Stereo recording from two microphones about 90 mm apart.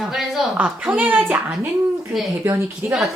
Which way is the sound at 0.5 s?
15° right (ahead or behind).